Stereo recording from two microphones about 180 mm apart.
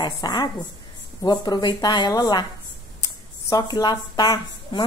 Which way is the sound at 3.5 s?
25° left (ahead or behind).